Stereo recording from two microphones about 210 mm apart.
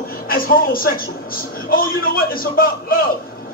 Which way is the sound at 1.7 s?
45° left (ahead or behind).